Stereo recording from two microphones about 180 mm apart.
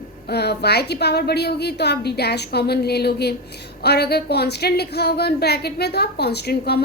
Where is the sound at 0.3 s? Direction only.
65° left (ahead or behind).